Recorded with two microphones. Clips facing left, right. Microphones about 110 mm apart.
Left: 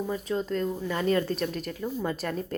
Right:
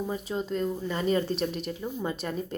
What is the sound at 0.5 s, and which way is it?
Speech, 10° right (ahead or behind).